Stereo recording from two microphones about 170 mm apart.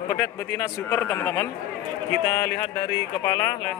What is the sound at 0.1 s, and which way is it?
Speech, 20° left (ahead or behind).